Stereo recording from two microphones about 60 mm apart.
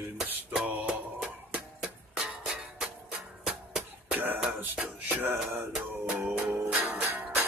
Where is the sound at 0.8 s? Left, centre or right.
Centre.